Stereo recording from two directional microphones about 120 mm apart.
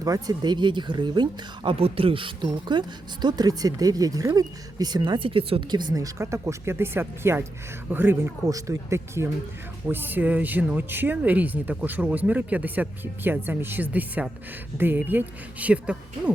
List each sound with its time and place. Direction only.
0.0 s speech: 30° right (ahead or behind); by 5.6 s 50° right (ahead or behind)
5.7 s speech: 35° right (ahead or behind); by 16.3 s 10° right (ahead or behind)